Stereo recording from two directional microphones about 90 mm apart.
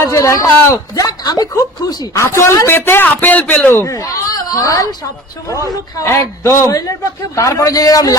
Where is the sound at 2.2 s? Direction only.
30° left (ahead or behind).